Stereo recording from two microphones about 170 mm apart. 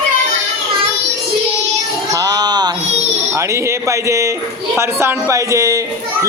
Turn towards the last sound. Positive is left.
turn(degrees=-20)  # may be behind; listen again after turning